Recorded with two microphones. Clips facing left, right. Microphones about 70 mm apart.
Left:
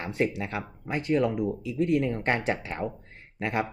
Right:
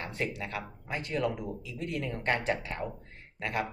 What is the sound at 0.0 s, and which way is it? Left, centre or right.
Speech, left.